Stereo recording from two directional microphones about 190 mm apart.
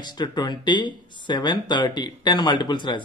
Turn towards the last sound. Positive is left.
turn(degrees=25)  # may be behind; listen again after turning